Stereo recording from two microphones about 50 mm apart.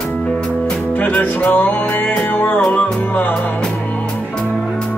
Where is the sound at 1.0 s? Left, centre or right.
Left.